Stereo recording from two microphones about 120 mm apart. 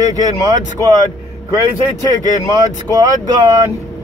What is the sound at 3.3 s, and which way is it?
Speech, 30° right (ahead or behind).